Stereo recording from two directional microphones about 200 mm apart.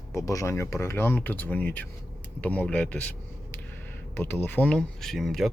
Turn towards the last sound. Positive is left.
turn(degrees=0)  # may be behind; listen again after turning